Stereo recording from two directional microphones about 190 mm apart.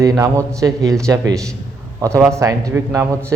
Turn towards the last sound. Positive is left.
turn(degrees=-15)  # may be behind; listen again after turning